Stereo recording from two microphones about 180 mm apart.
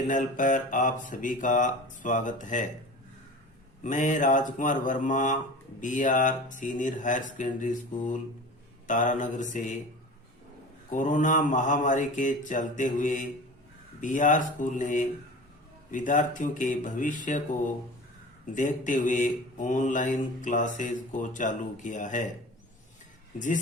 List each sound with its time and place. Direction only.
0.1 s mantra: 45° left (ahead or behind)
3.8 s mantra: 45° left (ahead or behind)
10.9 s mantra: 45° left (ahead or behind)
18.5 s mantra: 45° left (ahead or behind)